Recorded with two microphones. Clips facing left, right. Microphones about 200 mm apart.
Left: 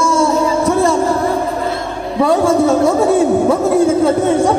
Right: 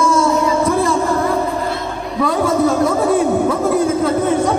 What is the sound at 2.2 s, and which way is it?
A man's voice, 30° left (ahead or behind).